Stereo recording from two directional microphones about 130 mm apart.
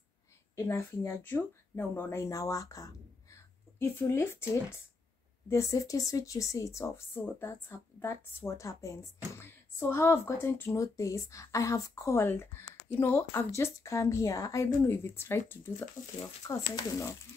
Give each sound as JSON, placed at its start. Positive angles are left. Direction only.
{"t": 0.6, "sound": "speech", "side_deg": 20}
{"t": 16.7, "sound": "speech", "side_deg": 20}